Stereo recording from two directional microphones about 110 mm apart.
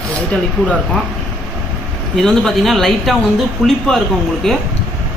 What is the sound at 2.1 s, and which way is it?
A man's voice, 5° left (ahead or behind).